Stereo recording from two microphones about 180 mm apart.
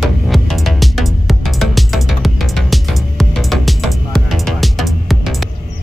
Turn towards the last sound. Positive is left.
turn(degrees=0)  # may be behind; listen again after turning